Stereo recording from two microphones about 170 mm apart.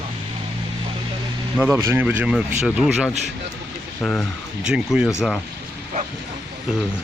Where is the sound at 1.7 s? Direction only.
15° right (ahead or behind).